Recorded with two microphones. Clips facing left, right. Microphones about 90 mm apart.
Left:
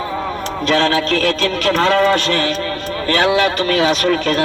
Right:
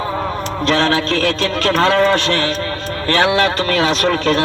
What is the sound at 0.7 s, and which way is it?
Speech, 30° right (ahead or behind).